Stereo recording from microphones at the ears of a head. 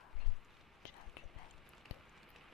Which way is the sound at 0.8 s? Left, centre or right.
Left.